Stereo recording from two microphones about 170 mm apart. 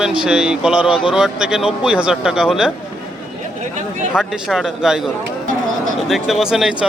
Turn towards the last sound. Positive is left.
turn(degrees=-5)  # may be behind; listen again after turning